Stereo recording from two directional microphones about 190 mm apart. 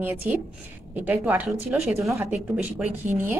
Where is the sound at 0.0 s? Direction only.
10° right (ahead or behind).